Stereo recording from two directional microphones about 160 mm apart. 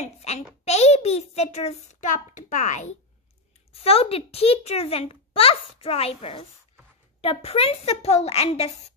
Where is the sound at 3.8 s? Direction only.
40° left (ahead or behind).